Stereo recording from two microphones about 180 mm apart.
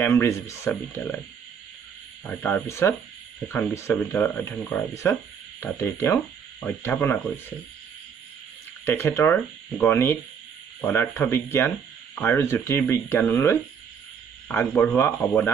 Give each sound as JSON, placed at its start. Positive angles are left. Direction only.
{"t": 0.0, "sound": "speech", "side_deg": 15}
{"t": 2.2, "sound": "speech", "side_deg": 10}
{"t": 8.8, "sound": "speech", "side_deg": 15}